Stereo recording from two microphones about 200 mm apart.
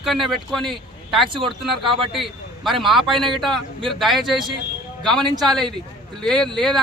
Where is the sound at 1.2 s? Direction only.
25° right (ahead or behind).